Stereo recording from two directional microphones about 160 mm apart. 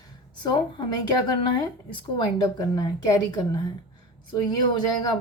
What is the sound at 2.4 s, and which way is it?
A woman's voice, 25° left (ahead or behind).